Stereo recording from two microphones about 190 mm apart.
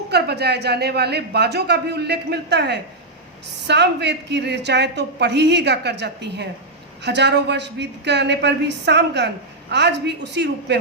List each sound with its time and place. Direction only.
0.1 s a woman's voice: 60° right (ahead or behind)